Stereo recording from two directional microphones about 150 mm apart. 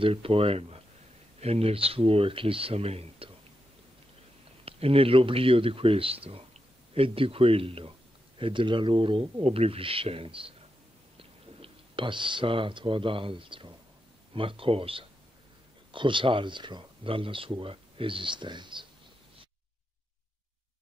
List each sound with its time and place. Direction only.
0.0 s speech: 40° right (ahead or behind)
4.6 s speech: 40° right (ahead or behind)